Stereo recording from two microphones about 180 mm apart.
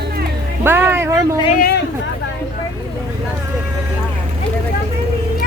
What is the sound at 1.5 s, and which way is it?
Speech, 55° left (ahead or behind).